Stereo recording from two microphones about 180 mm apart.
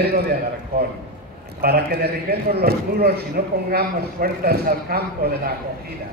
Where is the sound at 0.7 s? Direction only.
60° right (ahead or behind).